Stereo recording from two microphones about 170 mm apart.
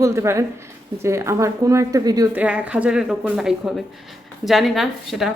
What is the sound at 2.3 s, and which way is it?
Speech, 10° right (ahead or behind).